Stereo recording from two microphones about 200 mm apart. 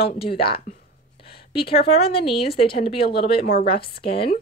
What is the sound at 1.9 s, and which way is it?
Speech, 30° left (ahead or behind).